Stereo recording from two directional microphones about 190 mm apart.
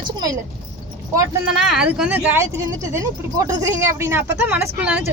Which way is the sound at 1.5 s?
5° right (ahead or behind).